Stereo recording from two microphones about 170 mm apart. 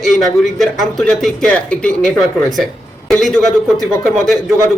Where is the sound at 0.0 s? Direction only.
Centre (ahead or behind).